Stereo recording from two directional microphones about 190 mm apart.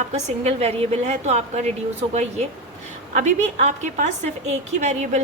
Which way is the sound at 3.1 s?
40° right (ahead or behind).